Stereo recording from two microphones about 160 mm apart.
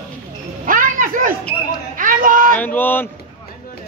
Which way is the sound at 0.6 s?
60° right (ahead or behind).